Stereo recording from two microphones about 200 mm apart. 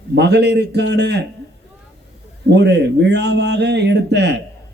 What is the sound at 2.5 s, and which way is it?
A man's voice, 60° right (ahead or behind).